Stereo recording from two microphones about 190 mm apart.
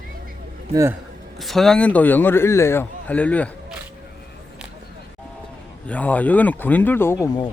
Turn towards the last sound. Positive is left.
turn(degrees=15)  # may be behind; listen again after turning